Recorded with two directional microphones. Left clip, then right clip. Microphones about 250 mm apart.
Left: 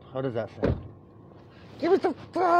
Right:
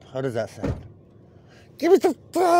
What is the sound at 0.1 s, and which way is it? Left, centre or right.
Speech, right.